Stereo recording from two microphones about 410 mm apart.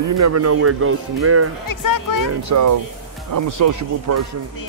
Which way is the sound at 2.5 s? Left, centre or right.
Right.